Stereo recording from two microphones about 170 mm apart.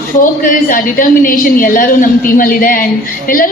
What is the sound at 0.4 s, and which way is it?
A woman's voice, 50° left (ahead or behind).